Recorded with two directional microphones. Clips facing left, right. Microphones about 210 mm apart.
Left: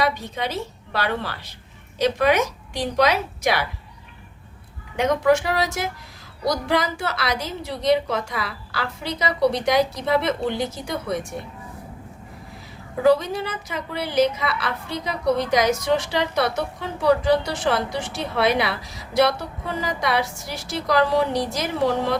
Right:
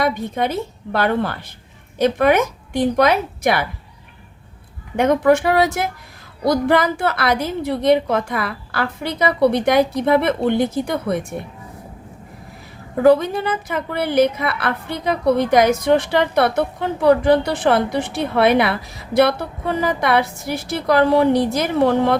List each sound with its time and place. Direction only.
0.0 s a woman's voice: 50° right (ahead or behind)
4.9 s a woman's voice: 55° right (ahead or behind)
13.0 s a woman's voice: 55° right (ahead or behind)